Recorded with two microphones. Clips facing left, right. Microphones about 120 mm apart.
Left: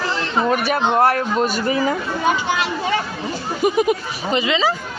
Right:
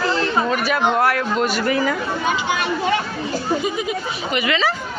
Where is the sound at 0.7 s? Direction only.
30° left (ahead or behind).